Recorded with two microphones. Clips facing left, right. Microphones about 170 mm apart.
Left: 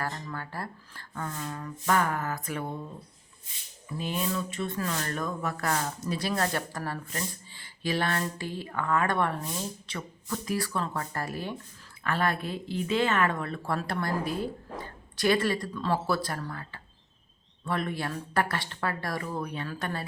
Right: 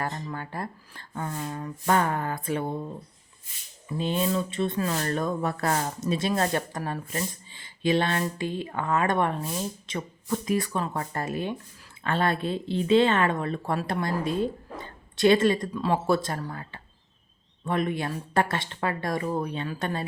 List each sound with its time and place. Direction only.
0.0 s a woman's voice: 20° right (ahead or behind); by 6.1 s 35° right (ahead or behind)
6.1 s a woman's voice: 20° right (ahead or behind)